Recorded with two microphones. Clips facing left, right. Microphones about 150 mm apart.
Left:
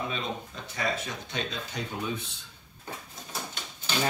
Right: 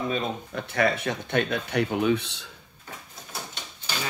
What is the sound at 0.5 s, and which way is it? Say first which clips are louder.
Speech: right 7 dB; 65° right (ahead or behind).